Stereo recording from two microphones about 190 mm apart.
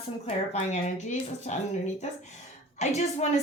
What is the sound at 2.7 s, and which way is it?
Speech, 35° left (ahead or behind).